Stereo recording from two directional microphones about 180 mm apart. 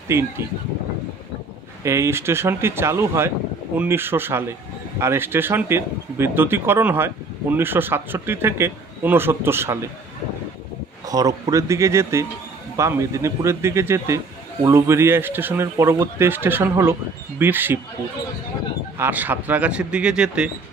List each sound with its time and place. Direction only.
0.1 s speech: 15° right (ahead or behind)
1.8 s speech: 15° right (ahead or behind)
11.1 s speech: 20° right (ahead or behind)
18.9 s speech: 10° right (ahead or behind)